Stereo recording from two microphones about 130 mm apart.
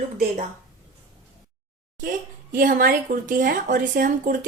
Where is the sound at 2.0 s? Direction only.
90° right.